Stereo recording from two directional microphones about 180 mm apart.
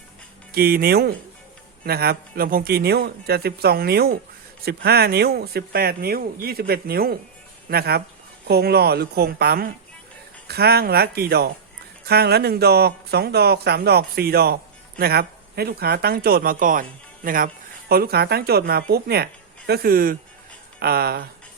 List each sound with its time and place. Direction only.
0.5 s speech: 55° right (ahead or behind)